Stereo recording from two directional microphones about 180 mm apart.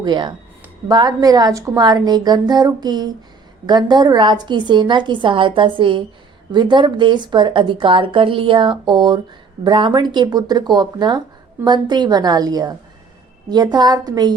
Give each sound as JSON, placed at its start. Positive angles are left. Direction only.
{"t": 0.0, "sound": "speech", "side_deg": -25}